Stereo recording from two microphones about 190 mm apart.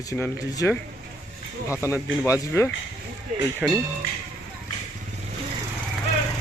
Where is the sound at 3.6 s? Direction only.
Centre (ahead or behind).